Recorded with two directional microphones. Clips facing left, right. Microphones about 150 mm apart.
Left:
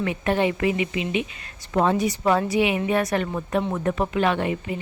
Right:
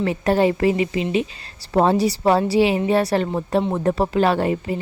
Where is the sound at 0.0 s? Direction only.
35° right (ahead or behind).